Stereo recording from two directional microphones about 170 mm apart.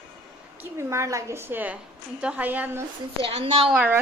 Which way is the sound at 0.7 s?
15° right (ahead or behind).